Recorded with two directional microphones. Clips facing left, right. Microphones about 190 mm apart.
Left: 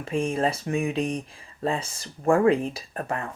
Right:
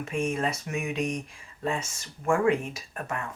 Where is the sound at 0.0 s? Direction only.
30° left (ahead or behind).